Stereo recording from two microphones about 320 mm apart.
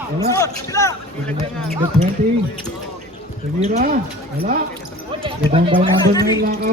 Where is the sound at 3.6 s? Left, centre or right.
Right.